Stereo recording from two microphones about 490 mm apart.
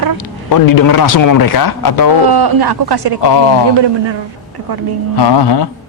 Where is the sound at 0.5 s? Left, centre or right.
Left.